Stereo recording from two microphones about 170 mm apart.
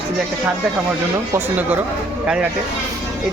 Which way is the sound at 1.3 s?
10° right (ahead or behind).